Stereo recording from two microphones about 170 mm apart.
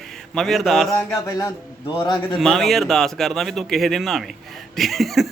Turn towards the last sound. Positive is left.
turn(degrees=0)  # may be behind; listen again after turning